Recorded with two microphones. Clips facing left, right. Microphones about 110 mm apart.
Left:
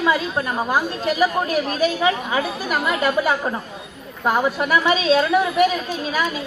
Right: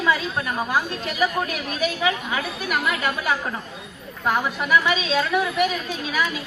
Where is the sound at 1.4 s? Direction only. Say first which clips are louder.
Left 6 dB; 35° left (ahead or behind).